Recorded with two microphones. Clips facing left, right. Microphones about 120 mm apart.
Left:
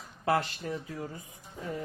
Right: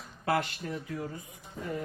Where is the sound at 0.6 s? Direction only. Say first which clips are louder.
Left 1 dB; 20° left (ahead or behind).